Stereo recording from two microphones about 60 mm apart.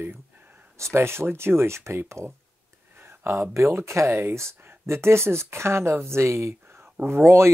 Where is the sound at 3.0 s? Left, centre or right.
Right.